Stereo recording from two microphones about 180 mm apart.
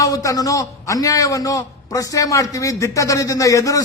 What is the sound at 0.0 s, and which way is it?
A man's voice, 20° left (ahead or behind).